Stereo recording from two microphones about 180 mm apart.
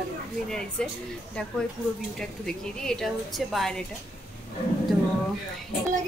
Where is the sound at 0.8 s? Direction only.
5° left (ahead or behind).